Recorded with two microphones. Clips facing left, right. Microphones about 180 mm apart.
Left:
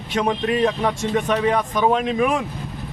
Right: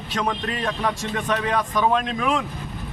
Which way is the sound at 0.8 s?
20° left (ahead or behind).